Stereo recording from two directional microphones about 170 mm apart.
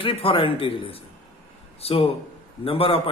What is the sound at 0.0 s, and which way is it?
A man's voice, 30° left (ahead or behind).